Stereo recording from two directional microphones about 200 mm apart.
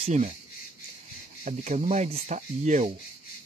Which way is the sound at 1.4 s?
35° right (ahead or behind).